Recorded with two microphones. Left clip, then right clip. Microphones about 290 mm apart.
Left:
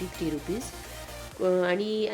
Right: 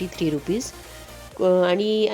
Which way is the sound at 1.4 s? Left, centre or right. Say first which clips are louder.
Right 7 dB; right.